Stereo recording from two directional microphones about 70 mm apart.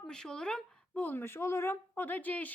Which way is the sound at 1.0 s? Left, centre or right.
Left.